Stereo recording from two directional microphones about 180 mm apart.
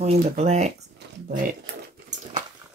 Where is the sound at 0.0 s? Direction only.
35° right (ahead or behind).